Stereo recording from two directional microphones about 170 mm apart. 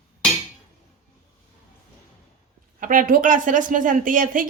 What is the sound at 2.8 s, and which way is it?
Speech, 55° right (ahead or behind).